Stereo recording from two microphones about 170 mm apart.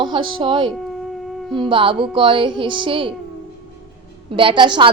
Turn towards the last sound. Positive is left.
turn(degrees=-25)  # may be behind; listen again after turning